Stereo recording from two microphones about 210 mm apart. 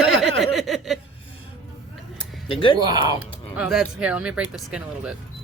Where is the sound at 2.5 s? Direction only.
25° left (ahead or behind).